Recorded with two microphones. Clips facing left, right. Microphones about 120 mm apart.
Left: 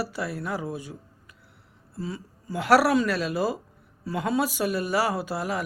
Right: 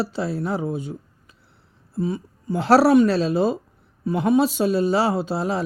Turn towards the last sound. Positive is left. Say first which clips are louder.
# right 5 dB
turn(degrees=-25)  # may be behind; listen again after turning